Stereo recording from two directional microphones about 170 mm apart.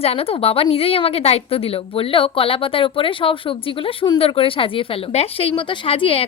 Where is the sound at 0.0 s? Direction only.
35° left (ahead or behind).